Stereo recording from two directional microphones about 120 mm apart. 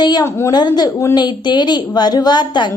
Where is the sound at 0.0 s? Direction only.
35° left (ahead or behind).